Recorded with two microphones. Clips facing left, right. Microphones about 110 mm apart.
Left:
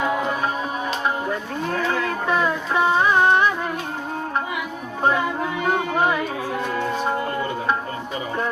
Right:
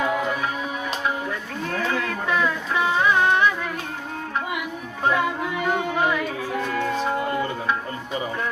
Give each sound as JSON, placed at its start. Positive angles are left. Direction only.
{"t": 0.3, "sound": "music", "side_deg": 35}
{"t": 5.6, "sound": "music", "side_deg": 35}